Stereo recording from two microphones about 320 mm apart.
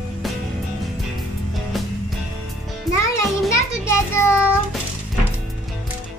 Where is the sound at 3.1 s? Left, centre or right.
Centre.